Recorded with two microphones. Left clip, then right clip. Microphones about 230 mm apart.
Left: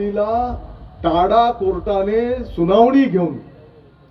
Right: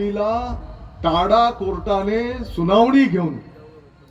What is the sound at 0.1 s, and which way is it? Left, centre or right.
Speech, right.